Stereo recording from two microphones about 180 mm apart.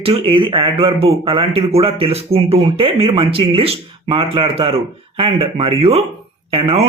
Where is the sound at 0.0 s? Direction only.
30° right (ahead or behind).